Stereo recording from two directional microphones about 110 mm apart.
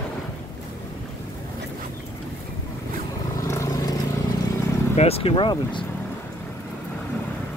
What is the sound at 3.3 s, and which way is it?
Vehicle, 30° left (ahead or behind).